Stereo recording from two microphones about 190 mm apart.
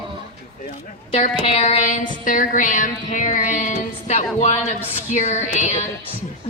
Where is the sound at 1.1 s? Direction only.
35° left (ahead or behind).